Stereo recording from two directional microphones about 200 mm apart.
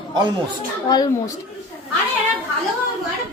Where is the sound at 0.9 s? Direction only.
20° left (ahead or behind).